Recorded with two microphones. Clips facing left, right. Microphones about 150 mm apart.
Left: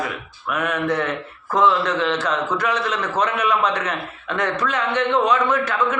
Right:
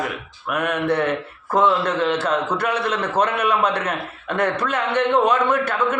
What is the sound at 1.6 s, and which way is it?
Mantra, 55° right (ahead or behind).